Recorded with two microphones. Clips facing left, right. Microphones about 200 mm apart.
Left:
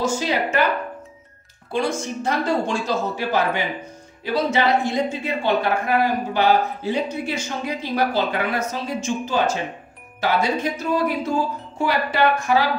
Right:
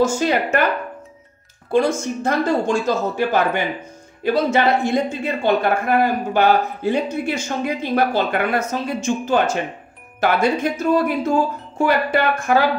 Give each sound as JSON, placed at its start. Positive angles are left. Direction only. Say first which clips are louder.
{"t": 0.0, "sound": "speech", "louder": "right 4 dB", "side_deg": -50}
{"t": 2.2, "sound": "speech", "louder": "right 3 dB", "side_deg": -45}